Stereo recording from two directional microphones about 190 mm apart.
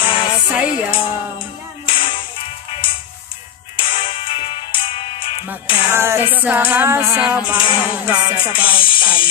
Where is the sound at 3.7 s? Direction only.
30° left (ahead or behind).